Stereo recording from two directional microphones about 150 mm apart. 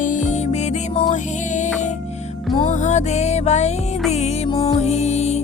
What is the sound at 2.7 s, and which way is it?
Music, 50° left (ahead or behind).